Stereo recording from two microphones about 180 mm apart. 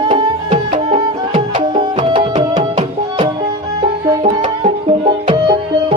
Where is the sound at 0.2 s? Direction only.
30° right (ahead or behind).